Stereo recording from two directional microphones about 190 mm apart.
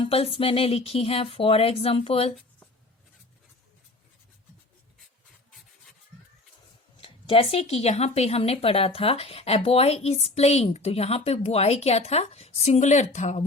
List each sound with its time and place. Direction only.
0.0 s speech: 30° left (ahead or behind)
7.0 s speech: 30° left (ahead or behind)